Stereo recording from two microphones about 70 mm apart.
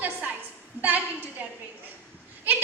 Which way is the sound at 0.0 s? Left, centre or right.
Right.